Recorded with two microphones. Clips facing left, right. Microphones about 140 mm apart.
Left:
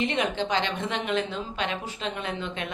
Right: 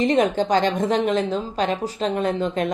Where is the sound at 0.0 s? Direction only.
40° right (ahead or behind).